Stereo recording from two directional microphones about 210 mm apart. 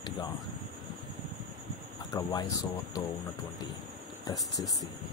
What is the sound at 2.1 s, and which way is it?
Speech, 20° left (ahead or behind).